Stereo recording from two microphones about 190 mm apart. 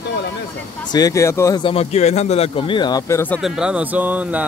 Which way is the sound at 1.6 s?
30° left (ahead or behind).